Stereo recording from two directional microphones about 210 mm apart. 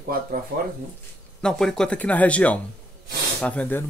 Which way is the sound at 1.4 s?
5° left (ahead or behind).